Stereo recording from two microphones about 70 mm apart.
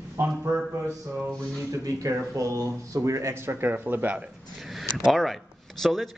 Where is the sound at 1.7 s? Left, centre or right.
Right.